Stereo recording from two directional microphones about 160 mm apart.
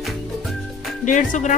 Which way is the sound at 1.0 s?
50° left (ahead or behind).